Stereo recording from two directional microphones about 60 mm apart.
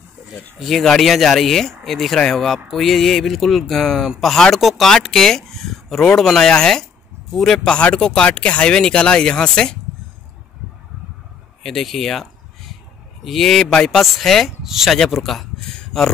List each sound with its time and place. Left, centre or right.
0.6 s speech: centre
11.6 s a sound: centre
13.2 s speech: centre